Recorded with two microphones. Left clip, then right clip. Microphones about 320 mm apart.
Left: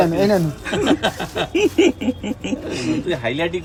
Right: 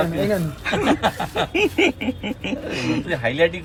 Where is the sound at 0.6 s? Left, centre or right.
Centre.